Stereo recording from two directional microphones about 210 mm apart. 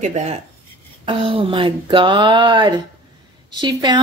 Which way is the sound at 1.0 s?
25° right (ahead or behind).